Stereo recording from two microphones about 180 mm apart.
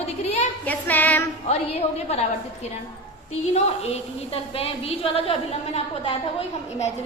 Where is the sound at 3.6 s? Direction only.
35° left (ahead or behind).